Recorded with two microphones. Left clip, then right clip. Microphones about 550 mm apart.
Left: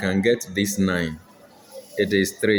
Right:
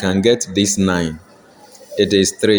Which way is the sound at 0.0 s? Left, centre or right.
Left.